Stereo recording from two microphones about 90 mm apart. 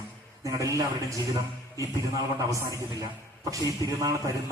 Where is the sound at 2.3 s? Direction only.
40° right (ahead or behind).